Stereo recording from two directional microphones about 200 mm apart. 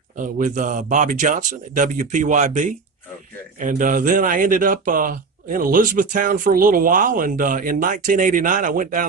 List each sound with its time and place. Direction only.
0.2 s speech: 40° right (ahead or behind)